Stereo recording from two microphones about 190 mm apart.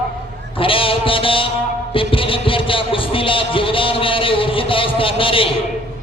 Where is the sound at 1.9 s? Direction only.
30° left (ahead or behind).